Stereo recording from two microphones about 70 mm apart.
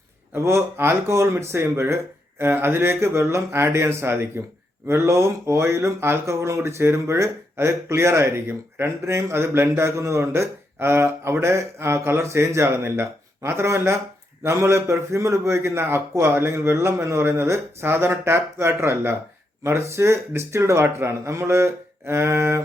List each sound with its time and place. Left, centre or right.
0.3 s speech: right